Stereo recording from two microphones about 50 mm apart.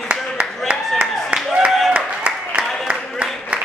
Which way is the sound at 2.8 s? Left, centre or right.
Right.